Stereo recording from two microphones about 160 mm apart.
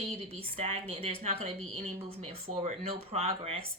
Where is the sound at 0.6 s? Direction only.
40° right (ahead or behind).